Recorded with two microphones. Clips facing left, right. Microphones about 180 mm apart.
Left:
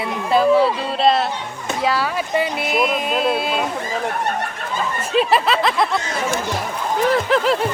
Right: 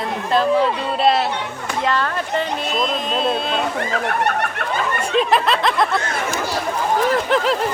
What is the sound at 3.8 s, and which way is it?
Speech, 70° right (ahead or behind).